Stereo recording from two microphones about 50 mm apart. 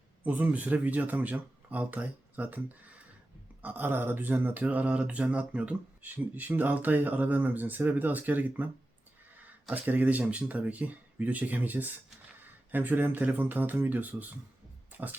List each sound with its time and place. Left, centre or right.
0.3 s speech: right
9.7 s speech: right